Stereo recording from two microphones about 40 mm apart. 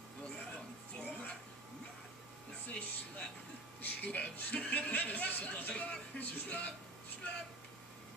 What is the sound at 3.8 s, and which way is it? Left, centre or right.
Speech, left.